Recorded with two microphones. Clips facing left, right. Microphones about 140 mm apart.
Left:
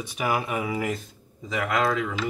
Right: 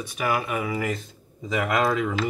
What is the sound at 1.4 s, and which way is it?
Speech, 10° right (ahead or behind).